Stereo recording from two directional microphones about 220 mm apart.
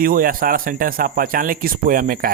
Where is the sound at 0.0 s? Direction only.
40° right (ahead or behind).